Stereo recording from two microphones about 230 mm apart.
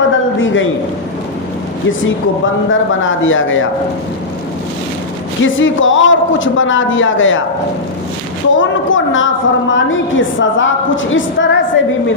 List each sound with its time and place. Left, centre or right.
0.1 s a sound: left
1.9 s a woman's voice: left
5.4 s a woman's voice: left
8.5 s a woman's voice: left